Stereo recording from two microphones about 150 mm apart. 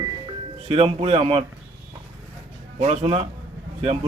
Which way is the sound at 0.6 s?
40° right (ahead or behind).